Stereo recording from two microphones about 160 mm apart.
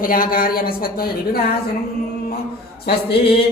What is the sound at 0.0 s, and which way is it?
Speech, 60° left (ahead or behind).